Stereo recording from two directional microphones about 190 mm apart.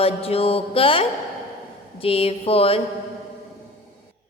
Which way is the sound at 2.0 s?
30° left (ahead or behind).